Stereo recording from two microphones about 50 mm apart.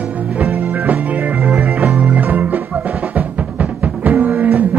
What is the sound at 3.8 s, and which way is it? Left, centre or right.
Music, right.